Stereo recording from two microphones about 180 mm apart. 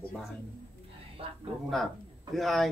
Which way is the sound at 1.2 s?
35° right (ahead or behind).